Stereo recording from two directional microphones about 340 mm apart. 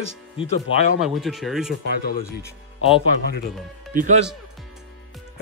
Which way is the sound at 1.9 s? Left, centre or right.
Left.